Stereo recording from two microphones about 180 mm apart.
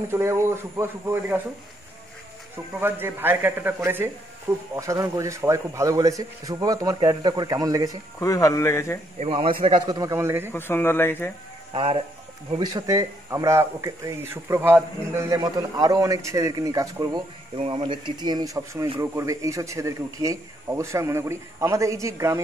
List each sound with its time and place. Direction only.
0.1 s speech: 15° right (ahead or behind)
2.8 s speech: 10° right (ahead or behind)
8.2 s a man's voice: 20° left (ahead or behind)
9.2 s speech: 30° right (ahead or behind); by 10.5 s 15° right (ahead or behind)
10.5 s a man's voice: 10° left (ahead or behind)
11.7 s speech: 30° right (ahead or behind)
12.5 s speech: 20° right (ahead or behind)
17.6 s speech: 30° right (ahead or behind)